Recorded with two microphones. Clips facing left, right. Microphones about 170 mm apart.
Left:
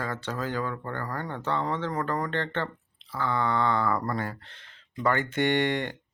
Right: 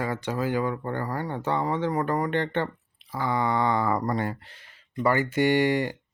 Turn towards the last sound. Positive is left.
turn(degrees=-5)  # may be behind; listen again after turning